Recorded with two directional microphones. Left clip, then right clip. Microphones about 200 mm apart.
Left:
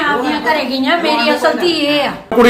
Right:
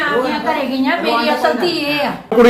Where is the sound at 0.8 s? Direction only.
20° left (ahead or behind).